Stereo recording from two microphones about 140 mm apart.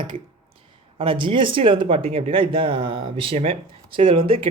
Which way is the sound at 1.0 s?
40° right (ahead or behind).